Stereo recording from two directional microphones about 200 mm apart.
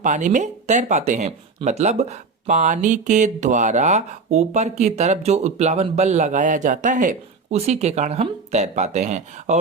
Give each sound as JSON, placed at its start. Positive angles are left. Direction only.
{"t": 0.0, "sound": "speech", "side_deg": -40}